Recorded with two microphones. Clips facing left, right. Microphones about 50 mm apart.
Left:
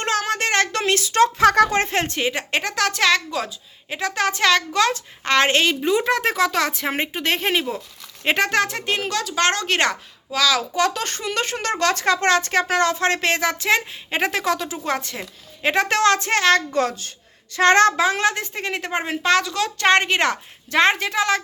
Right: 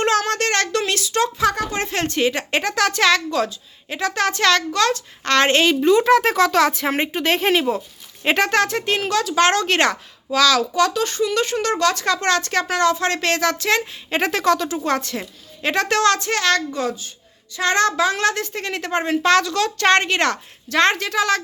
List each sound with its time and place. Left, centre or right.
0.0 s a sound: centre
0.7 s speech: left
2.0 s a woman's voice: centre
5.4 s a woman's voice: centre
10.6 s speech: left
10.9 s speech: left
13.2 s a woman's voice: centre
15.9 s speech: left
16.7 s speech: left
17.6 s speech: left
18.2 s a woman's voice: centre